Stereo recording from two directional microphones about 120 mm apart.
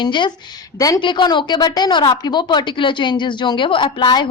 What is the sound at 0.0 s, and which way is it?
A woman's voice, 40° left (ahead or behind).